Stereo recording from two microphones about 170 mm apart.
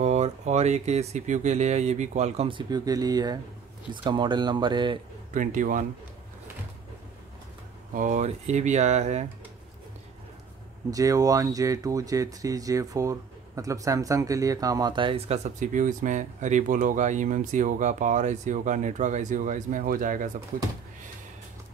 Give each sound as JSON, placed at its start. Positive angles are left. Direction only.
{"t": 0.0, "sound": "speech", "side_deg": -40}
{"t": 5.3, "sound": "speech", "side_deg": -50}
{"t": 7.9, "sound": "speech", "side_deg": -50}
{"t": 10.9, "sound": "speech", "side_deg": -20}